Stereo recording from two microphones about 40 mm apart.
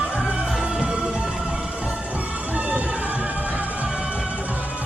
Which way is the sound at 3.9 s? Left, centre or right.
Right.